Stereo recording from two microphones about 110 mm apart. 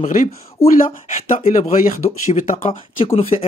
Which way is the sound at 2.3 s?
80° left.